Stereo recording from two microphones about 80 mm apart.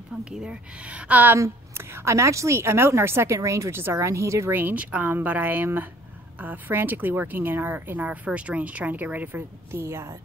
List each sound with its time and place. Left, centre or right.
0.2 s a woman's voice: centre
1.3 s a woman's voice: right
4.6 s speech: right